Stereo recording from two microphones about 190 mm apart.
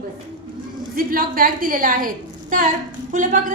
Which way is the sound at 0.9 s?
50° right (ahead or behind).